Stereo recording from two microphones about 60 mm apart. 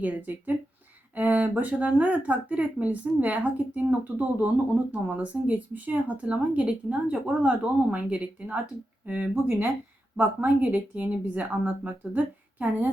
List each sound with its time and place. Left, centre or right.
0.0 s speech: right
9.3 s speech: right